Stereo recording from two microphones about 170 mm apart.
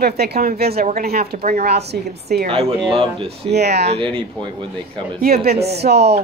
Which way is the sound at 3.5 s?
75° right (ahead or behind).